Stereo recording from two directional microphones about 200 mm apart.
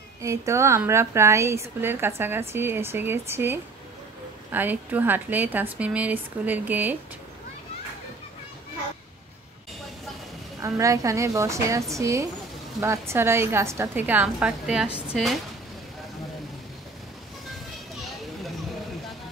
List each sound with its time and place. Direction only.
0.2 s a woman's voice: 15° right (ahead or behind)
10.6 s a woman's voice: 15° right (ahead or behind); by 15.3 s centre (ahead or behind)